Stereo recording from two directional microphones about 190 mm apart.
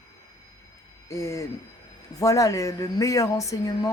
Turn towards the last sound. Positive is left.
turn(degrees=15)  # may be behind; listen again after turning